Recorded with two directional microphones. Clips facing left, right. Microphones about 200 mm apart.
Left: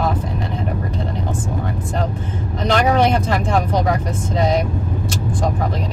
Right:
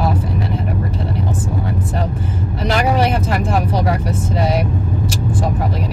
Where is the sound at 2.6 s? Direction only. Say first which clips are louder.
Left 1 dB; 5° right (ahead or behind).